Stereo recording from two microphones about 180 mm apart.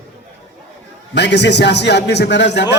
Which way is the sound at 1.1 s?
70° left (ahead or behind).